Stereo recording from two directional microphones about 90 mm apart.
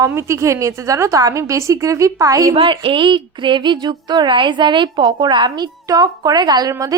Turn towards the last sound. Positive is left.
turn(degrees=-40)  # may be behind; listen again after turning